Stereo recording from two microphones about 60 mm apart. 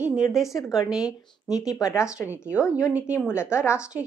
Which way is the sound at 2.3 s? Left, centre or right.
Right.